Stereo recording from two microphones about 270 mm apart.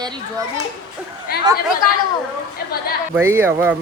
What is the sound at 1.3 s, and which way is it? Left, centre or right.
Speech, left.